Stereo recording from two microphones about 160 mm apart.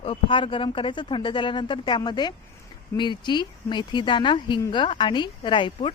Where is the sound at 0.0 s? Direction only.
30° left (ahead or behind).